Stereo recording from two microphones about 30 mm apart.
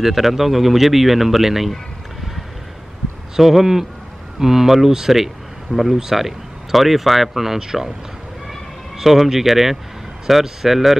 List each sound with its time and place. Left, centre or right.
0.0 s speech: centre
3.3 s speech: centre
7.5 s speech: centre
8.5 s a sound: centre
10.4 s speech: centre